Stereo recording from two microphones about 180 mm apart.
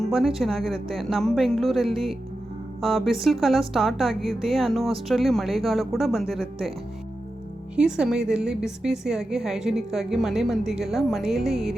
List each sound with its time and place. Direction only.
0.0 s a sound: centre (ahead or behind)
0.3 s a woman's voice: centre (ahead or behind)
7.8 s a woman's voice: 5° right (ahead or behind)